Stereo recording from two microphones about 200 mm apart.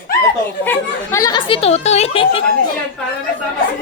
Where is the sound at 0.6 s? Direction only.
10° left (ahead or behind); by 2.4 s 30° left (ahead or behind).